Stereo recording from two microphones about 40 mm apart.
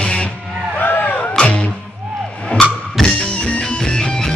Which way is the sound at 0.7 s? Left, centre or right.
Left.